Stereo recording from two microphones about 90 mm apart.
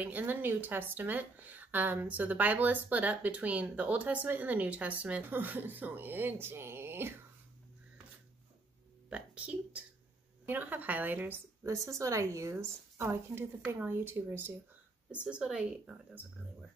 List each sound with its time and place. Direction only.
0.0 s a woman's voice: 20° right (ahead or behind)
9.1 s a woman's voice: 15° right (ahead or behind)
11.6 s a woman's voice: 35° right (ahead or behind)
15.2 s a woman's voice: 10° right (ahead or behind)